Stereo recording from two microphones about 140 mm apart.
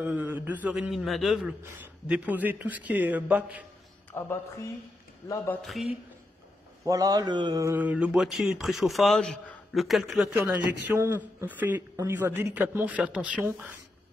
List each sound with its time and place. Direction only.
0.0 s a man's voice: 10° right (ahead or behind)
1.6 s a man's voice: 10° right (ahead or behind)
4.1 s speech: 15° left (ahead or behind)
5.6 s speech: centre (ahead or behind)
6.8 s speech: 25° right (ahead or behind); by 10.5 s 5° right (ahead or behind)
11.0 s a man's voice: 15° right (ahead or behind)